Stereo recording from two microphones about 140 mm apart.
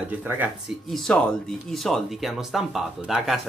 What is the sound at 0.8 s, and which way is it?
Speech, centre (ahead or behind).